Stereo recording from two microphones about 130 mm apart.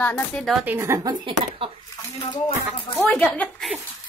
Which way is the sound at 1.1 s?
40° right (ahead or behind).